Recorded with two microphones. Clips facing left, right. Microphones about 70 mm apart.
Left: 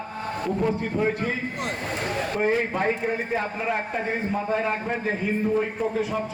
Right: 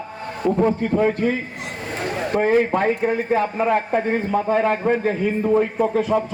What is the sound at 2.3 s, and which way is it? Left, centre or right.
Speech, right.